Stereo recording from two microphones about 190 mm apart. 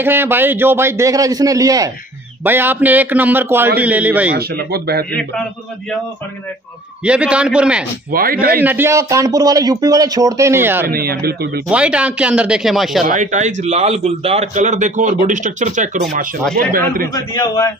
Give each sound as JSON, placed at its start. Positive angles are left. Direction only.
{"t": 0.0, "sound": "speech", "side_deg": -10}
{"t": 4.4, "sound": "speech", "side_deg": -55}
{"t": 7.1, "sound": "speech", "side_deg": -5}
{"t": 8.1, "sound": "a man's voice", "side_deg": -50}
{"t": 8.5, "sound": "speech", "side_deg": -10}
{"t": 10.9, "sound": "speech", "side_deg": -55}
{"t": 11.7, "sound": "speech", "side_deg": -5}
{"t": 13.0, "sound": "a man's voice", "side_deg": -40}
{"t": 17.1, "sound": "a man's voice", "side_deg": 20}